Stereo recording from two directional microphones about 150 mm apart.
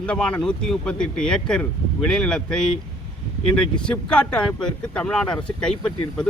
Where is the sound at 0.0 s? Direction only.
10° left (ahead or behind).